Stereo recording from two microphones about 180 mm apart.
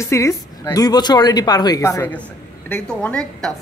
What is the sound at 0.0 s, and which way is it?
A woman's voice, 15° left (ahead or behind).